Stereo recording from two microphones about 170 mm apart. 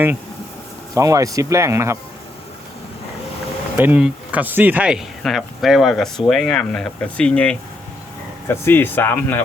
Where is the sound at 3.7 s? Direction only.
10° right (ahead or behind); by 9.4 s 10° left (ahead or behind).